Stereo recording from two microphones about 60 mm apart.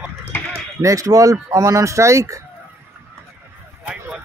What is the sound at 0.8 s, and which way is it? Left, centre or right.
Speech, right.